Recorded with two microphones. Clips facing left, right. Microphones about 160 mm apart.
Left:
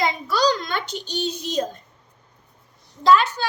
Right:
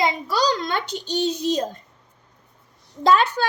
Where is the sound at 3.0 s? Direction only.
55° right (ahead or behind).